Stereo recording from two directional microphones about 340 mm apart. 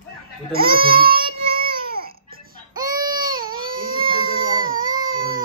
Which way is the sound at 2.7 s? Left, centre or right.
Centre.